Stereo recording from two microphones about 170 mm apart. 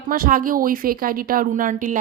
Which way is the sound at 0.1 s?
55° right (ahead or behind).